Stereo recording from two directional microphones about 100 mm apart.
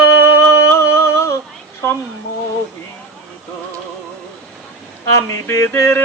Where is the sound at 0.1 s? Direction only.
30° left (ahead or behind).